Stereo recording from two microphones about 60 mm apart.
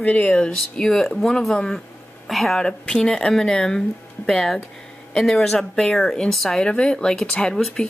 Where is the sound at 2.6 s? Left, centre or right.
Centre.